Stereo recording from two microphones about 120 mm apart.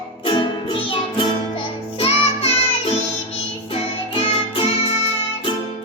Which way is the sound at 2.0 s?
55° left (ahead or behind).